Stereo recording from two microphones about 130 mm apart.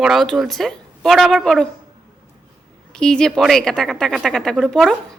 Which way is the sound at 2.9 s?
5° left (ahead or behind).